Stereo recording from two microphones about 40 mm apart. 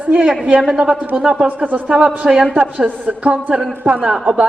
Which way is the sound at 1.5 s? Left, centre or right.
Right.